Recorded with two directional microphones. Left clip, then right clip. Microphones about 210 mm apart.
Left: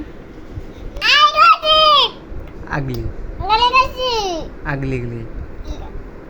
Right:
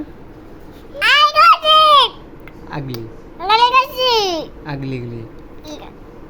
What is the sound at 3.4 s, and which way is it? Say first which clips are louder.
A child's voice: right 1 dB; 15° right (ahead or behind).